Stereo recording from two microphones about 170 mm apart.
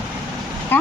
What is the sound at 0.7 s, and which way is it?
Vehicle, 10° left (ahead or behind).